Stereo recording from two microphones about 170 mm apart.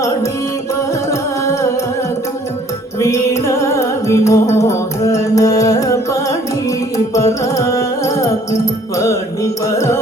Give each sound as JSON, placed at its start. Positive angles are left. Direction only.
{"t": 1.1, "sound": "music", "side_deg": 15}
{"t": 3.0, "sound": "music", "side_deg": 15}